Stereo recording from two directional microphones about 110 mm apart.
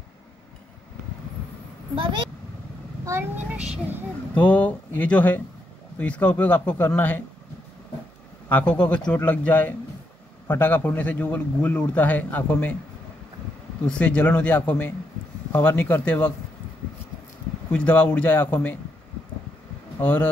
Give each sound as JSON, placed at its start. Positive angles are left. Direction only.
{"t": 2.0, "sound": "speech", "side_deg": -50}
{"t": 3.1, "sound": "a woman's voice", "side_deg": -25}
{"t": 3.4, "sound": "speech", "side_deg": -10}
{"t": 4.3, "sound": "speech", "side_deg": 15}
{"t": 8.5, "sound": "speech", "side_deg": 15}
{"t": 13.8, "sound": "speech", "side_deg": 10}
{"t": 17.6, "sound": "speech", "side_deg": 10}
{"t": 20.0, "sound": "speech", "side_deg": 15}